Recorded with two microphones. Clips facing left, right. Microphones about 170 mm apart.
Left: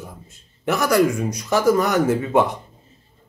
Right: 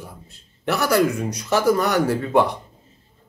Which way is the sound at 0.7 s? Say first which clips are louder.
Left 1 dB; 15° left (ahead or behind).